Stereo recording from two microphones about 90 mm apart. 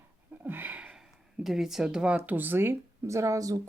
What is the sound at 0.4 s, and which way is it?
Sniff, 20° right (ahead or behind).